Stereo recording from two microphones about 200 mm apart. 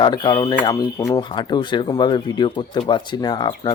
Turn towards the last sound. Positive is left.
turn(degrees=20)  # may be behind; listen again after turning